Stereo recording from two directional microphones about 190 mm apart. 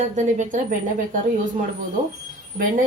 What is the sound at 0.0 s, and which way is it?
A woman's voice, 40° right (ahead or behind).